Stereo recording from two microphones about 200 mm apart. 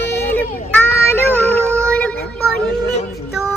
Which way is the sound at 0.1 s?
10° left (ahead or behind).